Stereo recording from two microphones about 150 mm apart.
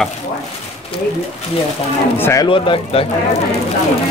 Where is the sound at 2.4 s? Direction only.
35° left (ahead or behind).